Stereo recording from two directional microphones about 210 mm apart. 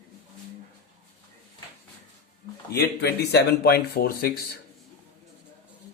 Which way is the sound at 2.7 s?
50° left (ahead or behind).